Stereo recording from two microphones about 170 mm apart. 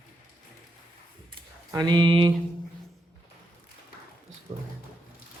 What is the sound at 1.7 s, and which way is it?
Speech, 25° right (ahead or behind).